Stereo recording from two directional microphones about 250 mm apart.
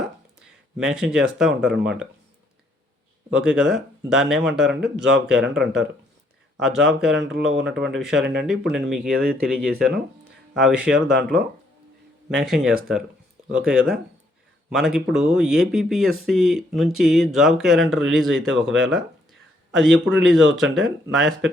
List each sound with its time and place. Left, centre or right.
0.8 s speech: centre
3.2 s speech: centre
7.0 s speech: centre
7.3 s speech: right
7.7 s speech: centre
18.9 s a sound: centre
20.6 s speech: centre